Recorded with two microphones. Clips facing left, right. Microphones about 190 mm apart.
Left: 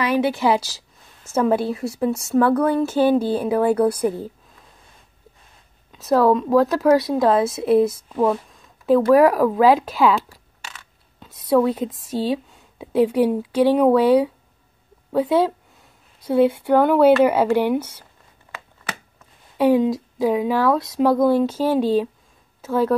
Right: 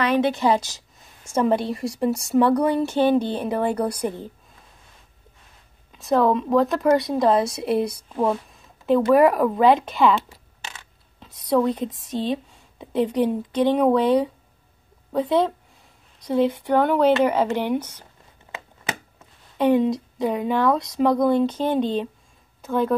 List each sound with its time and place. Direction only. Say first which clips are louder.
0.0 s a woman's voice: left 1 dB; 10° left (ahead or behind)
5.9 s a woman's voice: left 3 dB; centre (ahead or behind)
10.3 s a sound: right 1 dB; 25° right (ahead or behind)
11.1 s a woman's voice: left 3 dB; 5° left (ahead or behind)
19.5 s a woman's voice: left 2 dB; 5° left (ahead or behind)